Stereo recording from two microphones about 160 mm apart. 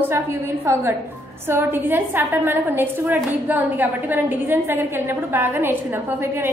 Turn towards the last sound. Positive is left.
turn(degrees=-15)  # may be behind; listen again after turning